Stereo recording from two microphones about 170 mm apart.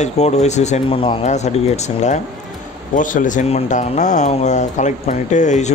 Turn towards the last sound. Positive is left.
turn(degrees=45)  # may be behind; listen again after turning